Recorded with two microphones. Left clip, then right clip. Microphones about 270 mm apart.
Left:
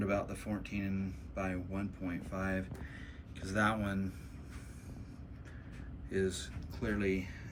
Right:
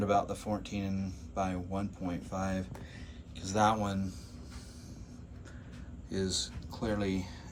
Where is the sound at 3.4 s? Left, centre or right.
Right.